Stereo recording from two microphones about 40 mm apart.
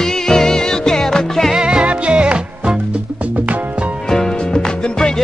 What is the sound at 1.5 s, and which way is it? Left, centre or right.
Music, centre.